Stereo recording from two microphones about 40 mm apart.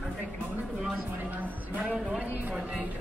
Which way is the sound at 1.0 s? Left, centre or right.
Right.